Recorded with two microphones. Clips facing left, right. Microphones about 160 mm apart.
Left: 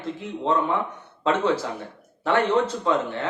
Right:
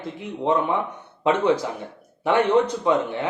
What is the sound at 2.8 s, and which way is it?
Speech, 15° right (ahead or behind).